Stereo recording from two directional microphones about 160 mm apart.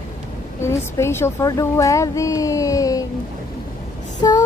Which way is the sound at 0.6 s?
15° left (ahead or behind).